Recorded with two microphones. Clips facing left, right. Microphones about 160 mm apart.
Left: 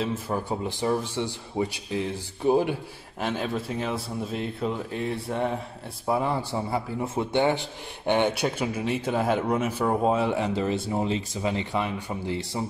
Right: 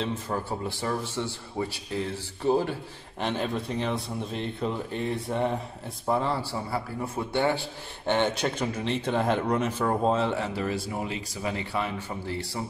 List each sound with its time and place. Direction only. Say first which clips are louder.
0.0 s a man's voice: left 2 dB; 15° left (ahead or behind)
3.2 s a man's voice: even; 5° left (ahead or behind)
6.0 s a man's voice: left 1 dB; 10° left (ahead or behind)